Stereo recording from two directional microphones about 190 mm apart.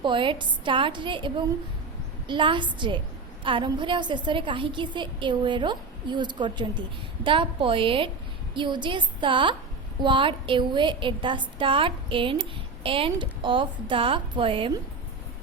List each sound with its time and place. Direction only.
0.0 s a woman's voice: 25° right (ahead or behind)